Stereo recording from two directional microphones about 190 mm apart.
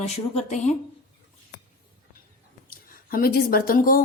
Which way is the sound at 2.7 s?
50° left (ahead or behind).